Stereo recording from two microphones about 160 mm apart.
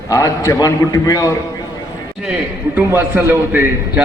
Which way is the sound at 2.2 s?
10° right (ahead or behind).